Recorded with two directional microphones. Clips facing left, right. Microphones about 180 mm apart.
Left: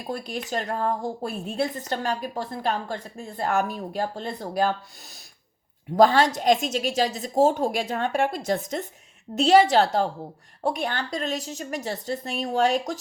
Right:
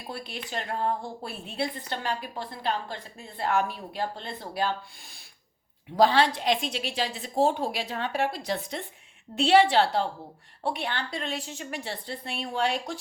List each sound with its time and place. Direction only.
0.1 s a woman's voice: 45° left (ahead or behind)